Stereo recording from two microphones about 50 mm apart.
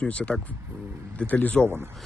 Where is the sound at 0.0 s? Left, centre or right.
Left.